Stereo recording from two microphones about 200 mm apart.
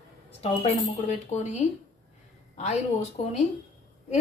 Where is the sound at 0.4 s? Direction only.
35° left (ahead or behind).